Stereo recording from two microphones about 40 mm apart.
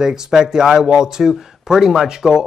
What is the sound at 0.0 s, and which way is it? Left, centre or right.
A man's voice, centre.